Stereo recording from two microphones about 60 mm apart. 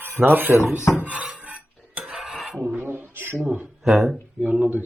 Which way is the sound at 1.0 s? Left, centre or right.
Right.